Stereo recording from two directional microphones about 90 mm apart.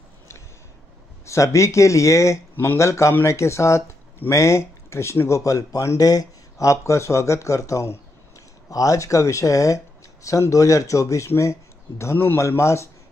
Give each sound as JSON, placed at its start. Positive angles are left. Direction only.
{"t": 1.2, "sound": "speech", "side_deg": 35}